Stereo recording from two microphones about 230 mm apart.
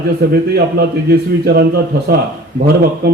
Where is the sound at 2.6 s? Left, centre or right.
Right.